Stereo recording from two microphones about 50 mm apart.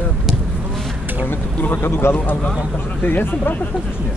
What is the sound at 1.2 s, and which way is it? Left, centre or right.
Speech, left.